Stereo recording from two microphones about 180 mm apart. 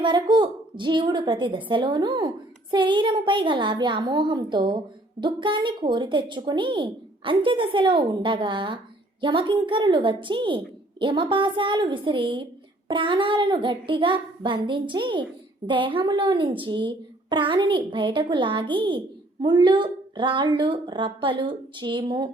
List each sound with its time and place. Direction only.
0.0 s a woman's voice: 25° right (ahead or behind)